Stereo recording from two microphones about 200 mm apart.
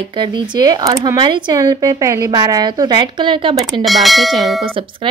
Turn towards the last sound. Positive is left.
turn(degrees=-25)  # may be behind; listen again after turning